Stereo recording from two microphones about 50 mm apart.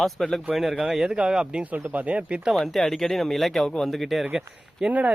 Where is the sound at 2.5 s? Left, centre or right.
Centre.